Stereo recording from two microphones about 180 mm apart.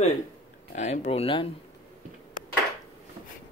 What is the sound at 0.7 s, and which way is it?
Speech, 40° left (ahead or behind).